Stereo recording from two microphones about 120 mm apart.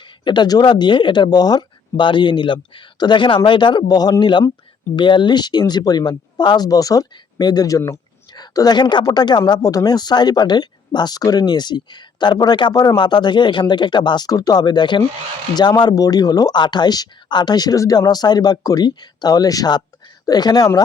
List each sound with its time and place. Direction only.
0.3 s speech: 35° left (ahead or behind)